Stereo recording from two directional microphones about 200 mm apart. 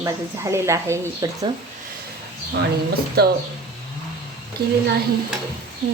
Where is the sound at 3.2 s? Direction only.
50° right (ahead or behind).